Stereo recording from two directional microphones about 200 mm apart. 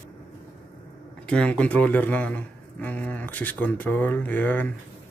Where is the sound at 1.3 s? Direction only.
5° left (ahead or behind).